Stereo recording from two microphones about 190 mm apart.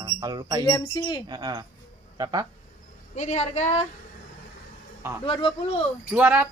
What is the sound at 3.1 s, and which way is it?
Speech, 40° left (ahead or behind).